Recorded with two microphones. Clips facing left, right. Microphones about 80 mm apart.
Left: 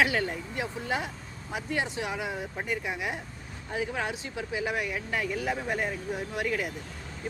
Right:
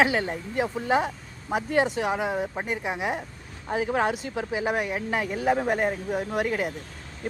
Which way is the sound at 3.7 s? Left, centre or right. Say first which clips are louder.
Right 7 dB; right.